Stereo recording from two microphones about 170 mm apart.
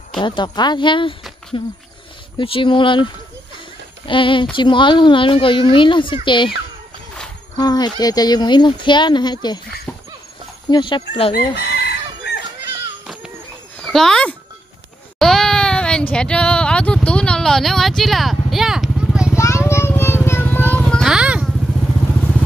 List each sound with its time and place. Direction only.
0.2 s a child's voice: 25° left (ahead or behind)
4.1 s a child's voice: 30° left (ahead or behind)
7.5 s a child's voice: 25° left (ahead or behind)
10.7 s a child's voice: 25° left (ahead or behind)
11.3 s chicken: 70° left (ahead or behind)
13.0 s a sound: centre (ahead or behind)
19.3 s vehicle: 15° left (ahead or behind)
20.7 s a sound: centre (ahead or behind)